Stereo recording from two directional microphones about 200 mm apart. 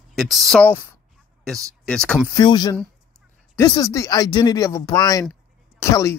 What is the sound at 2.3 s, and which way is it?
Speech, 20° left (ahead or behind).